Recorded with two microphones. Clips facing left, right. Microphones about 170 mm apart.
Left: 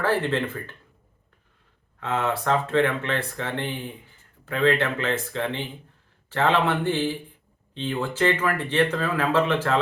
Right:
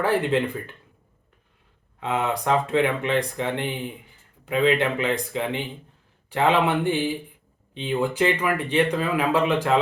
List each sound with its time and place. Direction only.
0.0 s speech: 15° right (ahead or behind)
2.0 s speech: 15° right (ahead or behind)